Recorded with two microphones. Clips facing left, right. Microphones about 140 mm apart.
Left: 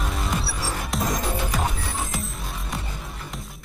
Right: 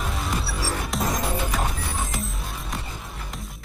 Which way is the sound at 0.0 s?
Centre (ahead or behind).